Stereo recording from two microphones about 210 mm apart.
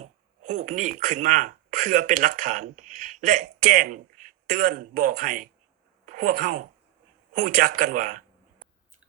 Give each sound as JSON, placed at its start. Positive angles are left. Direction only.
{"t": 0.0, "sound": "speech", "side_deg": -35}